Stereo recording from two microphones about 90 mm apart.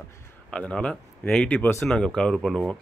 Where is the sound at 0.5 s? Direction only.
10° left (ahead or behind).